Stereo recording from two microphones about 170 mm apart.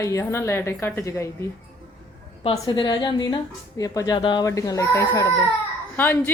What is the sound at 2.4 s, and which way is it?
Speech, 30° left (ahead or behind).